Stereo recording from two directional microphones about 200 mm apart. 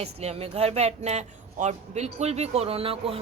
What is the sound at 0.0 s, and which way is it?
Speech, 30° right (ahead or behind).